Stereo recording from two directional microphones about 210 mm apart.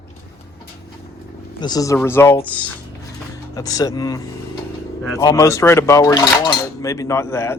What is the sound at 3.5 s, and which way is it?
Speech, 15° left (ahead or behind).